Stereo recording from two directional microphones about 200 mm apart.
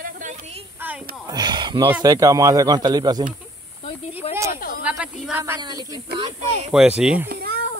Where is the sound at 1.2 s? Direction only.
20° right (ahead or behind).